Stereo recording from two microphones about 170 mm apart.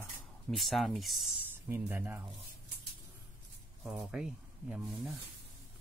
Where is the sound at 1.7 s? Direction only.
10° right (ahead or behind).